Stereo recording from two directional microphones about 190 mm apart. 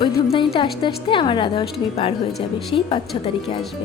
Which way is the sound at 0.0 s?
25° left (ahead or behind).